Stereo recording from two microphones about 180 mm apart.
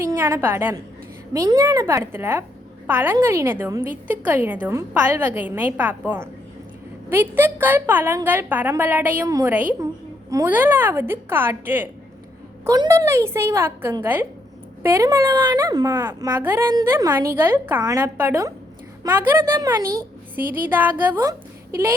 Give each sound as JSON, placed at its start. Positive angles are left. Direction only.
{"t": 0.0, "sound": "a woman's voice", "side_deg": -15}
{"t": 16.0, "sound": "a woman's voice", "side_deg": -10}